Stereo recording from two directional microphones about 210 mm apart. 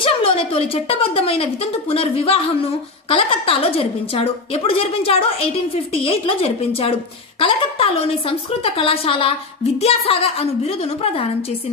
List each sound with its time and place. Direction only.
0.0 s a woman's voice: 25° left (ahead or behind)